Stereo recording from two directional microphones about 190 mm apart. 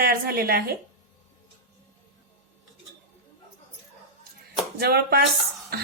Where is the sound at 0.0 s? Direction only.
55° right (ahead or behind).